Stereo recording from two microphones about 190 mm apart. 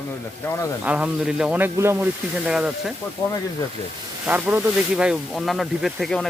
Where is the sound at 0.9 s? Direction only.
5° right (ahead or behind).